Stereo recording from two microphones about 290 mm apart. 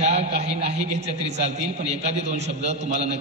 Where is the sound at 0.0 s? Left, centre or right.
Right.